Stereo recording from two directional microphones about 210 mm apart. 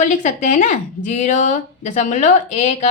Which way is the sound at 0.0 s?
35° left (ahead or behind).